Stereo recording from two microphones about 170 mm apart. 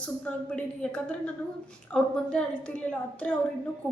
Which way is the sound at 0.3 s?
5° left (ahead or behind).